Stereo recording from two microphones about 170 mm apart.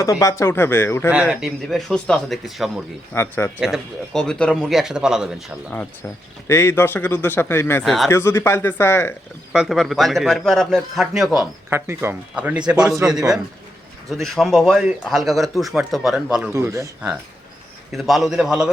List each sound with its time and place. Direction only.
0.0 s a man's voice: 20° left (ahead or behind)
1.1 s a man's voice: 5° right (ahead or behind)
3.1 s a man's voice: 15° left (ahead or behind)
3.6 s a man's voice: centre (ahead or behind)
5.7 s a man's voice: 10° left (ahead or behind)
7.9 s a man's voice: centre (ahead or behind)
8.1 s a man's voice: 15° left (ahead or behind)
9.5 s a man's voice: 5° right (ahead or behind)
11.7 s speech: 15° right (ahead or behind)
14.1 s a man's voice: centre (ahead or behind)
16.5 s speech: 15° right (ahead or behind)
17.9 s a man's voice: centre (ahead or behind)